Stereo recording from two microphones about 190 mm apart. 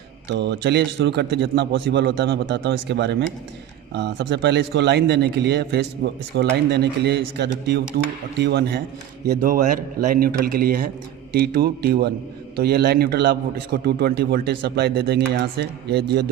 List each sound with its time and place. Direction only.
0.3 s a man's voice: 65° right (ahead or behind)
9.2 s a man's voice: 50° right (ahead or behind)